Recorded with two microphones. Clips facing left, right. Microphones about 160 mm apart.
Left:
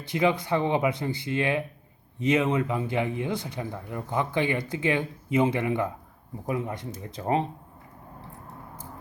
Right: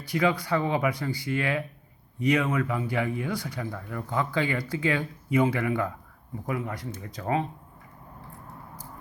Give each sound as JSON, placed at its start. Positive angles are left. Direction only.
{"t": 0.0, "sound": "speech", "side_deg": 20}